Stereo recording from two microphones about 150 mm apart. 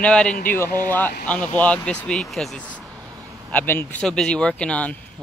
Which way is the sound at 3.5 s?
10° left (ahead or behind).